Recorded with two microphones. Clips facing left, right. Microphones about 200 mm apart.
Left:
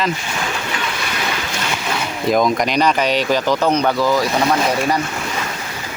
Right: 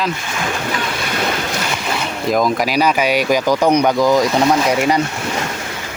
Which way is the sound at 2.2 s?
Centre (ahead or behind).